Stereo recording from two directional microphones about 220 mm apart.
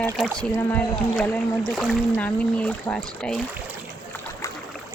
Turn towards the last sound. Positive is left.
turn(degrees=5)  # may be behind; listen again after turning